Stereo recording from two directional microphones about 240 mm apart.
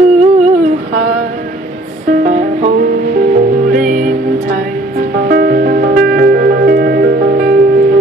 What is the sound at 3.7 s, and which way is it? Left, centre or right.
Music, right.